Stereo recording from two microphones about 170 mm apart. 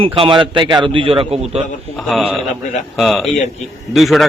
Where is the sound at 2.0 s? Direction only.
Centre (ahead or behind).